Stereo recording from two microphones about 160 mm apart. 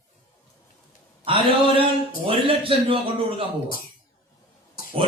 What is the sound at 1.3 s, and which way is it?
A man's voice, 35° right (ahead or behind).